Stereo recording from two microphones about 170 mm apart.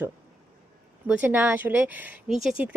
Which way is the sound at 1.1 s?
10° right (ahead or behind).